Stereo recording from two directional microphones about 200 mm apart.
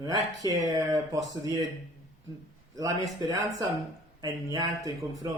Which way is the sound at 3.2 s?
15° right (ahead or behind).